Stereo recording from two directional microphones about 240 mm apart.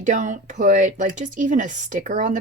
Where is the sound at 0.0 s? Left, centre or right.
Right.